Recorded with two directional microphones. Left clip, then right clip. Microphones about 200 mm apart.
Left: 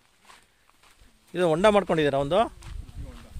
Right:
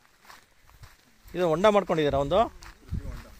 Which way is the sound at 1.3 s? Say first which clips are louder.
Left 1 dB; 20° left (ahead or behind).